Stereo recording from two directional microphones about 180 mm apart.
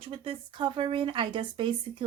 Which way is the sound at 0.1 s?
30° right (ahead or behind).